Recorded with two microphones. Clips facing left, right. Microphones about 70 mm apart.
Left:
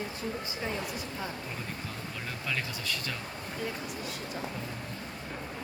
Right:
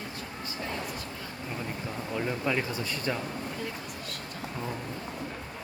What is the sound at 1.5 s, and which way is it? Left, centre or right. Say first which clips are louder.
Speech: right 3 dB; centre.